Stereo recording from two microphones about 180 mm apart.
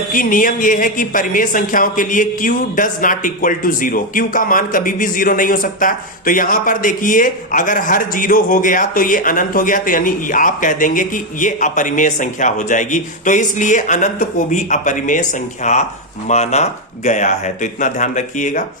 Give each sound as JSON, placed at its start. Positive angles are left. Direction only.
{"t": 0.1, "sound": "speech", "side_deg": 50}